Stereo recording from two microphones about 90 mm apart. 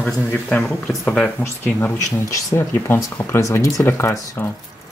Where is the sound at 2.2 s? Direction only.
30° left (ahead or behind).